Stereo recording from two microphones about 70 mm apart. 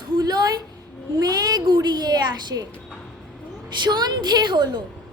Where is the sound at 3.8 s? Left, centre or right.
Right.